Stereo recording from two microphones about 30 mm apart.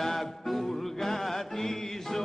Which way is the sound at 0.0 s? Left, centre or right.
Centre.